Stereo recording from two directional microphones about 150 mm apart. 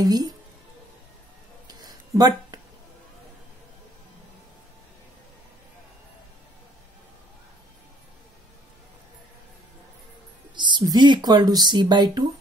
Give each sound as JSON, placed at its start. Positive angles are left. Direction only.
{"t": 0.0, "sound": "speech", "side_deg": -25}
{"t": 1.7, "sound": "a sound", "side_deg": -25}
{"t": 10.5, "sound": "speech", "side_deg": -30}